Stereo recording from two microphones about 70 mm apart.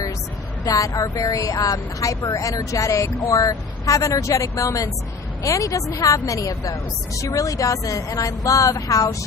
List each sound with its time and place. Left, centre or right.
0.7 s a woman's voice: left